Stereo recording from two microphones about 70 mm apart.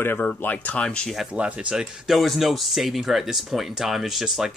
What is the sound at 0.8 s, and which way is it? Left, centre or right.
Speech, centre.